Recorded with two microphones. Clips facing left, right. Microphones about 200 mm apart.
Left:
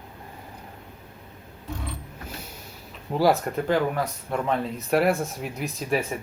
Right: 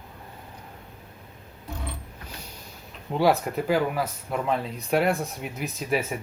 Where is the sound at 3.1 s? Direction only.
Centre (ahead or behind).